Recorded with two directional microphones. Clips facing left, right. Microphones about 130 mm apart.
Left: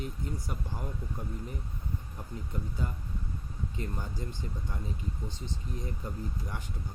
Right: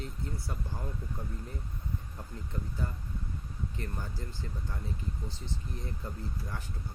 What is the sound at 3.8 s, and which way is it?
Speech, 15° left (ahead or behind).